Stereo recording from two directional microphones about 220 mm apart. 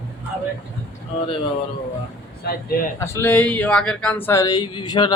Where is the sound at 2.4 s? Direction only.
45° left (ahead or behind).